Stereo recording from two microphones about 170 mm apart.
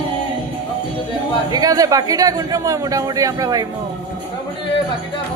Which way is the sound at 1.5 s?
20° right (ahead or behind).